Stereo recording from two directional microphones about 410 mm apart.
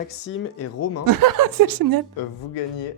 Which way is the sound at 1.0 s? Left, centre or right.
Right.